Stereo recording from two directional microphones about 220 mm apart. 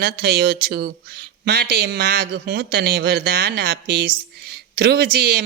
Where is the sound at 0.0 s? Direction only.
45° right (ahead or behind).